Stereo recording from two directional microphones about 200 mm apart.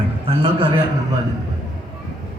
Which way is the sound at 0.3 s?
30° right (ahead or behind).